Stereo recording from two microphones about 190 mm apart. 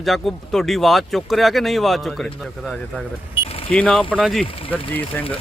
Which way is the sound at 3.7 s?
5° left (ahead or behind).